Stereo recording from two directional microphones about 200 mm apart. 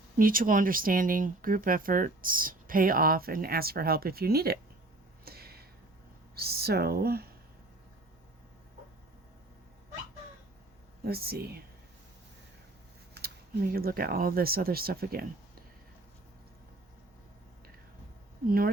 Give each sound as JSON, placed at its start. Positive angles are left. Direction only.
{"t": 0.2, "sound": "speech", "side_deg": -45}
{"t": 5.2, "sound": "a sound", "side_deg": -50}
{"t": 6.3, "sound": "speech", "side_deg": -50}
{"t": 11.0, "sound": "speech", "side_deg": -50}
{"t": 13.1, "sound": "speech", "side_deg": -50}
{"t": 18.4, "sound": "speech", "side_deg": -45}